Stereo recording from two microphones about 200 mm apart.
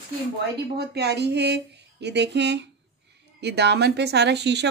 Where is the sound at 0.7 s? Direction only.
55° right (ahead or behind).